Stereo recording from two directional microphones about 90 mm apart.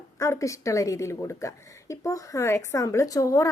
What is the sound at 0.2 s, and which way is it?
A woman's voice, 35° left (ahead or behind).